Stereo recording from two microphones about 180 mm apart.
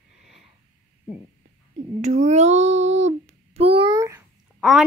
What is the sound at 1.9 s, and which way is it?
A child's voice, 40° right (ahead or behind).